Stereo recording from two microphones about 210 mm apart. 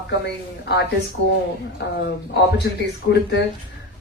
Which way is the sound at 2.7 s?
55° left (ahead or behind).